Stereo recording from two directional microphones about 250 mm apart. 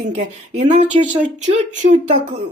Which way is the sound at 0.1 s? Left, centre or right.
Right.